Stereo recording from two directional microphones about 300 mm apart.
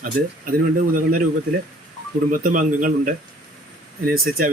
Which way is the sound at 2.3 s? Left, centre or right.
Right.